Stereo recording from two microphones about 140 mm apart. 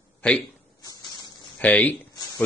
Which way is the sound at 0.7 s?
25° left (ahead or behind).